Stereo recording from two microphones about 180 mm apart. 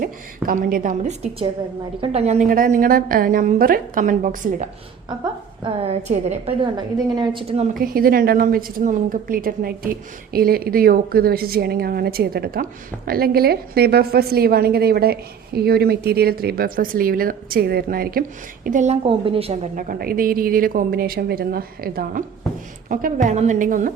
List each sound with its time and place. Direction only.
0.4 s a woman's voice: 50° right (ahead or behind)
5.6 s a woman's voice: 35° right (ahead or behind)
6.7 s a woman's voice: 25° right (ahead or behind)
7.7 s a woman's voice: 55° right (ahead or behind); by 19.5 s 30° right (ahead or behind)
19.7 s a woman's voice: 55° right (ahead or behind)